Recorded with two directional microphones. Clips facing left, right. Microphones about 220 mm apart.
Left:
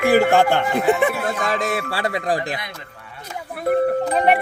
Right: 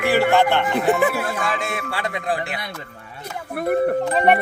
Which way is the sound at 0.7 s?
Centre (ahead or behind).